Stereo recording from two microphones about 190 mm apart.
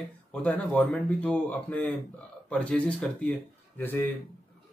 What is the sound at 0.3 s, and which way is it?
Speech, 10° left (ahead or behind).